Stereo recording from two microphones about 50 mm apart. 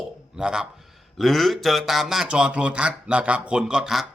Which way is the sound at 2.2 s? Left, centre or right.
Centre.